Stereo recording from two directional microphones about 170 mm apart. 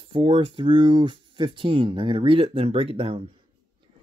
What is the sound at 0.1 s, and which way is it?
Speech, 30° right (ahead or behind).